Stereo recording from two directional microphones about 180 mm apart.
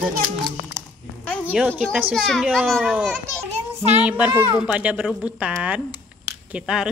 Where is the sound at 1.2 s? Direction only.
5° left (ahead or behind).